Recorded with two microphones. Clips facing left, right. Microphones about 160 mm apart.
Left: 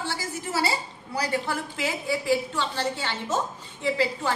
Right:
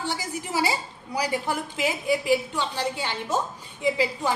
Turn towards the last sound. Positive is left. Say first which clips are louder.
# right 1 dB
turn(degrees=-15)  # may be behind; listen again after turning